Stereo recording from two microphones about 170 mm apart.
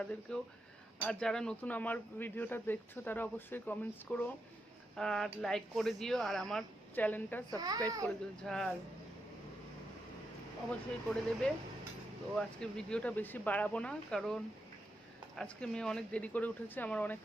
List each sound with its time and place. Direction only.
0.0 s speech: 5° left (ahead or behind)
7.5 s a child's voice: 20° right (ahead or behind)
8.0 s speech: 5° left (ahead or behind)
10.7 s speech: 5° left (ahead or behind)